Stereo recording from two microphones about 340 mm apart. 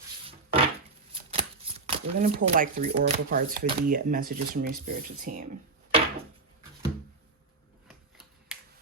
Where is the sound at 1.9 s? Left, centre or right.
Right.